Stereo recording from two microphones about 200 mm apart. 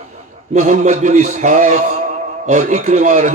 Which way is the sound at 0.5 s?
40° right (ahead or behind).